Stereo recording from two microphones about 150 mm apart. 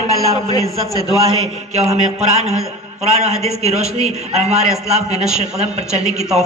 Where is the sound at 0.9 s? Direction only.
25° left (ahead or behind).